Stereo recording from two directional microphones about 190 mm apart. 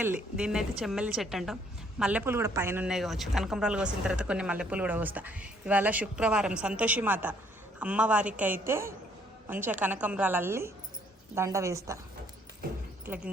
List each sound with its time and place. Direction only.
0.0 s a woman's voice: 5° right (ahead or behind)